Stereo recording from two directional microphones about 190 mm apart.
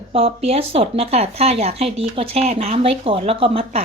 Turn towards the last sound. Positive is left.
turn(degrees=-30)  # may be behind; listen again after turning